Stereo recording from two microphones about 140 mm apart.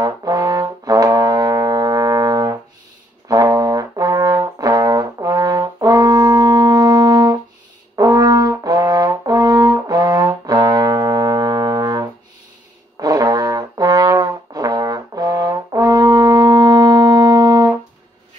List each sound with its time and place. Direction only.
0.0 s brass instrument: 25° right (ahead or behind)